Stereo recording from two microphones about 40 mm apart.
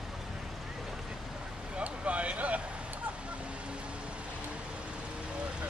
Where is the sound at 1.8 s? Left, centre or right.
Right.